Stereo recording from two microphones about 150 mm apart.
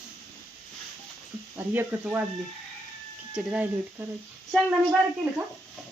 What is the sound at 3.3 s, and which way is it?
Speech, 5° right (ahead or behind).